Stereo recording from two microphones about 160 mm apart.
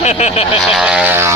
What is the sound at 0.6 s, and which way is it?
Speech, 5° right (ahead or behind).